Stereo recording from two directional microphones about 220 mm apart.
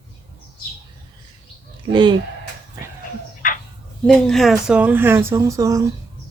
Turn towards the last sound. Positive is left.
turn(degrees=-15)  # may be behind; listen again after turning